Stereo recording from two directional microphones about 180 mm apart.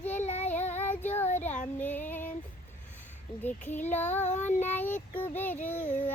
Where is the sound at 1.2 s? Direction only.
40° left (ahead or behind).